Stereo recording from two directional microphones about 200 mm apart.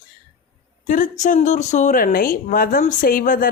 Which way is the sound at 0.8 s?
40° left (ahead or behind).